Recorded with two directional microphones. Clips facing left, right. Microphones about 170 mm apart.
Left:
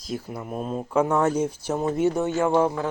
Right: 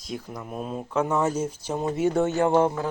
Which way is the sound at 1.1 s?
5° right (ahead or behind).